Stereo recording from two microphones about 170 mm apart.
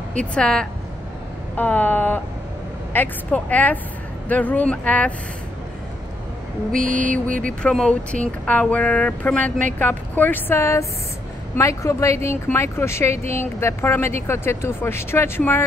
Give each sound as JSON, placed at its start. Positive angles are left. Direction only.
{"t": 0.3, "sound": "speech", "side_deg": 5}
{"t": 6.7, "sound": "mantra", "side_deg": -50}
{"t": 7.6, "sound": "speech", "side_deg": 5}